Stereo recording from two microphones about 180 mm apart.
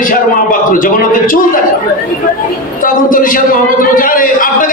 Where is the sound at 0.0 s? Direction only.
50° left (ahead or behind).